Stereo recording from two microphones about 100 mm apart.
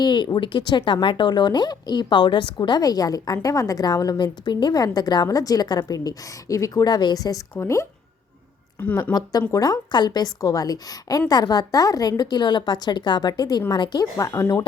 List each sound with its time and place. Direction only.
0.0 s speech: 45° left (ahead or behind); by 7.9 s 30° left (ahead or behind)
9.5 s a woman's voice: 35° left (ahead or behind)